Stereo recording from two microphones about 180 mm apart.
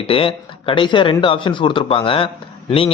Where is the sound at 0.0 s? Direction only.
30° left (ahead or behind).